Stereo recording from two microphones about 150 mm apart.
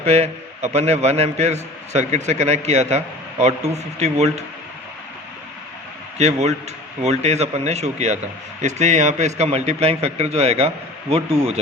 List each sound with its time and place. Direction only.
0.0 s a man's voice: 45° right (ahead or behind)
6.1 s a man's voice: 50° right (ahead or behind)